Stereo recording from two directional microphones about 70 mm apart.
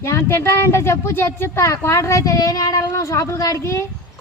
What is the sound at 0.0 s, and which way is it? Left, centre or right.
Speech, left.